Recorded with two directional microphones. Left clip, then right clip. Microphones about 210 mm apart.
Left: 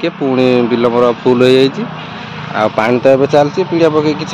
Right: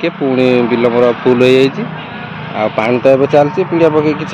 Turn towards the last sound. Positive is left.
turn(degrees=0)  # may be behind; listen again after turning